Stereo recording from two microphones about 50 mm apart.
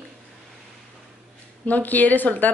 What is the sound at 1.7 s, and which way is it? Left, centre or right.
Speech, left.